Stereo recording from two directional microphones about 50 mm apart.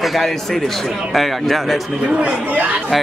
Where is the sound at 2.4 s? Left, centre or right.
Right.